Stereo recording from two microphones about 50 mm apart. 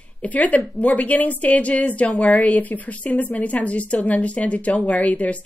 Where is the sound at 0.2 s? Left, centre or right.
Left.